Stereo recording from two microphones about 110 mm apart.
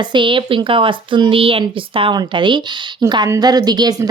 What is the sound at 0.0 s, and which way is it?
Speech, 45° right (ahead or behind).